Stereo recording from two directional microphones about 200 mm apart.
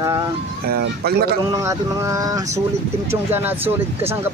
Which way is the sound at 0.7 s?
50° right (ahead or behind).